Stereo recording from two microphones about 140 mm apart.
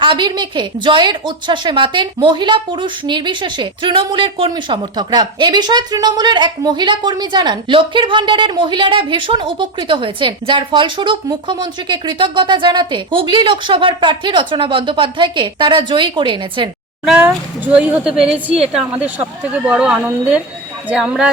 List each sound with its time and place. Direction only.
0.0 s a woman's voice: 35° right (ahead or behind)
17.1 s speech: 10° right (ahead or behind)